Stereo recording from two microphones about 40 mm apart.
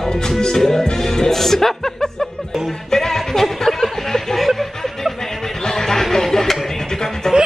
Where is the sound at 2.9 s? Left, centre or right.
Centre.